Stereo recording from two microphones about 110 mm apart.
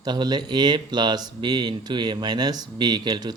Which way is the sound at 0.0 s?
40° right (ahead or behind).